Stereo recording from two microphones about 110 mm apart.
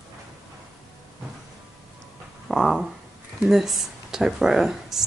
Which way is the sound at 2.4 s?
Centre (ahead or behind).